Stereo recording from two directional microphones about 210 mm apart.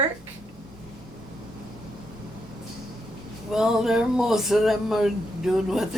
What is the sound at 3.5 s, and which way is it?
Speech, centre (ahead or behind).